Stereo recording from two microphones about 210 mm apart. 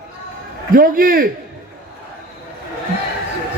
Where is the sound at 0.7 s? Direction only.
40° right (ahead or behind).